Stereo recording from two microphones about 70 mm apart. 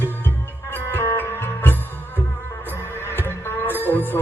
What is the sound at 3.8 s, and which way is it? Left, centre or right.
Music, left.